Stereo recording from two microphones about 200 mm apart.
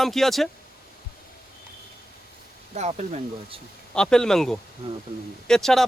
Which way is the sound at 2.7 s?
35° right (ahead or behind).